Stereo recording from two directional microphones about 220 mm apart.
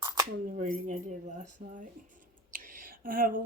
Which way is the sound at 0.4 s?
35° right (ahead or behind).